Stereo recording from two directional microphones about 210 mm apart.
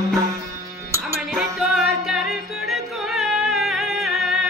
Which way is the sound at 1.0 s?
Centre (ahead or behind).